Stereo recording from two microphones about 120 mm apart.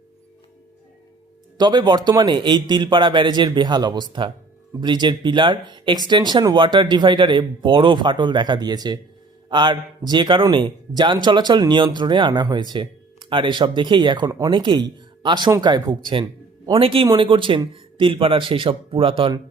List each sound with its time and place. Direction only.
1.5 s speech: 35° right (ahead or behind)